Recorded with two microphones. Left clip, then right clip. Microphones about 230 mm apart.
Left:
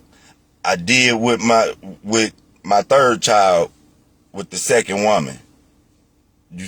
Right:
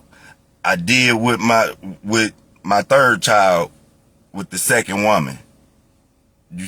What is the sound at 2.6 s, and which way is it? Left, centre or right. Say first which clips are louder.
Speech: even; right.